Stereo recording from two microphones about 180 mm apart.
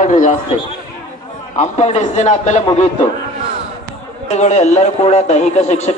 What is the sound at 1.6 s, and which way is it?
A man's voice, 40° left (ahead or behind).